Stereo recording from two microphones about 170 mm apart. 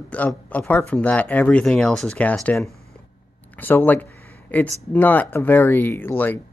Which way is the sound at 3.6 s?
10° left (ahead or behind).